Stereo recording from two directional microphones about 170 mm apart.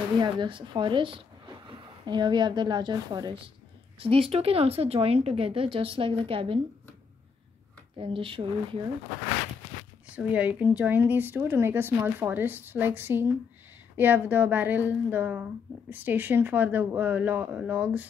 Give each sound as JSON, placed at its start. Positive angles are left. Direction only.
{"t": 0.2, "sound": "a woman's voice", "side_deg": -30}
{"t": 8.0, "sound": "a woman's voice", "side_deg": -30}
{"t": 10.0, "sound": "speech", "side_deg": -10}